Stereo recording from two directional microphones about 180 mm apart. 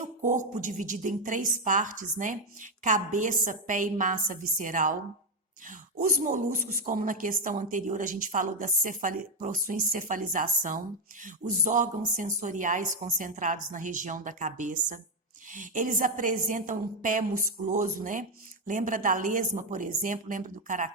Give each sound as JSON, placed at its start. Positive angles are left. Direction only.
{"t": 0.0, "sound": "a woman's voice", "side_deg": -45}